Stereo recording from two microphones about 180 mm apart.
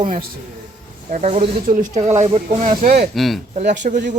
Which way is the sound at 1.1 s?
35° right (ahead or behind).